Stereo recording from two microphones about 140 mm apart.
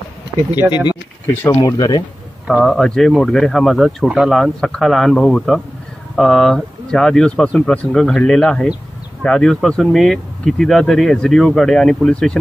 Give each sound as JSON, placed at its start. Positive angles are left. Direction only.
{"t": 0.7, "sound": "speech", "side_deg": 30}
{"t": 1.2, "sound": "speech", "side_deg": 15}
{"t": 1.6, "sound": "speech", "side_deg": 30}
{"t": 2.4, "sound": "speech", "side_deg": 0}